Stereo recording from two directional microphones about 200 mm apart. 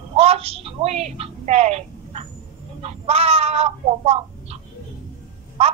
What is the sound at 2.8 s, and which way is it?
Speech, 30° right (ahead or behind).